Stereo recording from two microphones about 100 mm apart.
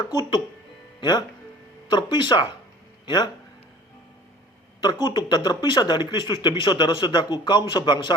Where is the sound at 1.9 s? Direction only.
50° left (ahead or behind).